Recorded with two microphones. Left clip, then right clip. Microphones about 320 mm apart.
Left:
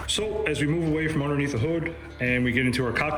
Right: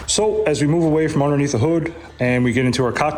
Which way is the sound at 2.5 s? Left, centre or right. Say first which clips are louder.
Right 6 dB; centre.